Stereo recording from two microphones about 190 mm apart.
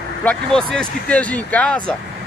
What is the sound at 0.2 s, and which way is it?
Speech, 5° left (ahead or behind).